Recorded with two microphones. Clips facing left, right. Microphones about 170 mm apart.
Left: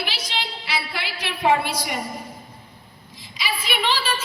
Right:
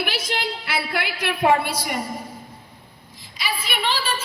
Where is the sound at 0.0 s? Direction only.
55° right (ahead or behind).